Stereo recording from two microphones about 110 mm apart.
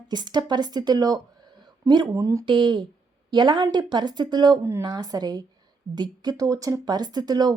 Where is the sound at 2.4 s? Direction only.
45° right (ahead or behind).